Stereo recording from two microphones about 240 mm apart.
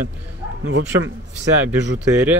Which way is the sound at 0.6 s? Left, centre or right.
Right.